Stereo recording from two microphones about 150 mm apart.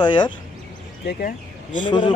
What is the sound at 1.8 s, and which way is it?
Speech, 35° left (ahead or behind).